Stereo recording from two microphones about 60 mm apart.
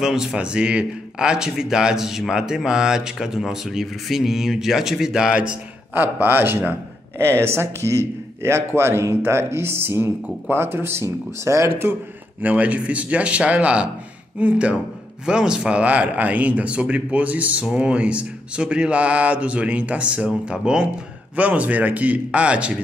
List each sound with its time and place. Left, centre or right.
0.0 s speech: centre
5.9 s a man's voice: right
12.4 s a man's voice: right
15.8 s a man's voice: right